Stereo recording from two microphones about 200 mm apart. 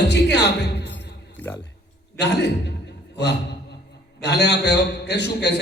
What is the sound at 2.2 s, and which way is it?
Speech, 55° left (ahead or behind).